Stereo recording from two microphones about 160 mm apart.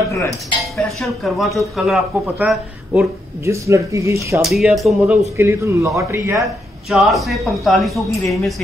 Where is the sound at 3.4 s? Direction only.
20° right (ahead or behind).